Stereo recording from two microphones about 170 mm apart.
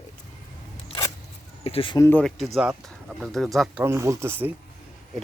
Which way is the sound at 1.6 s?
35° left (ahead or behind).